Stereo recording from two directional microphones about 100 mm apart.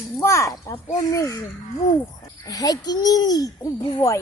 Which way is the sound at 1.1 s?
35° left (ahead or behind).